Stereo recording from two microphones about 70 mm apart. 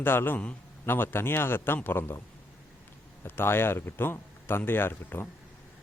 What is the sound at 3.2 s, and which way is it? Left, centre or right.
Speech, left.